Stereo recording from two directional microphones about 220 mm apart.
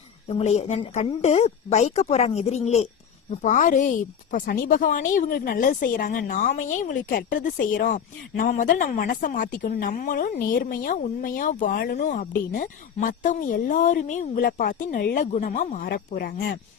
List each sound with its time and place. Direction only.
0.3 s a woman's voice: 30° left (ahead or behind)